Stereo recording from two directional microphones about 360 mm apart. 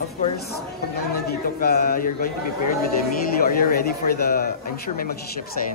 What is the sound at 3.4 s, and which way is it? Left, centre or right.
Speech, left.